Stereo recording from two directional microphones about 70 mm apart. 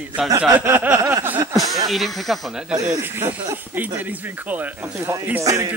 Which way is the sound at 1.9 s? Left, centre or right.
Centre.